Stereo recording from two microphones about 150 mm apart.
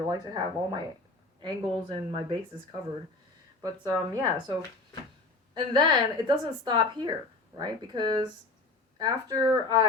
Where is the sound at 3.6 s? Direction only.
25° right (ahead or behind).